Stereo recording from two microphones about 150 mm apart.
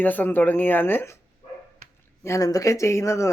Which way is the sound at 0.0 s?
10° left (ahead or behind).